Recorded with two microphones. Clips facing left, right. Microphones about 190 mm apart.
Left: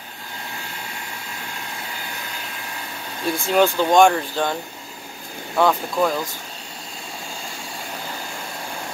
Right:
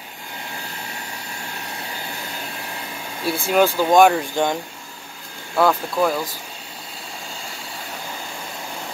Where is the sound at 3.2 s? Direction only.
5° right (ahead or behind).